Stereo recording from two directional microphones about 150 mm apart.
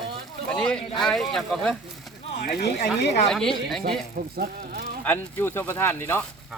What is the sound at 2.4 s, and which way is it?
Speech, 90° left.